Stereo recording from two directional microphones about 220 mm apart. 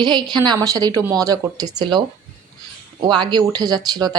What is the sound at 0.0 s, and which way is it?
A woman's voice, 20° right (ahead or behind).